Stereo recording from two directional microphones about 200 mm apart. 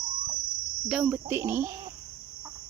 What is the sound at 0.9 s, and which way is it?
Speech, 5° right (ahead or behind).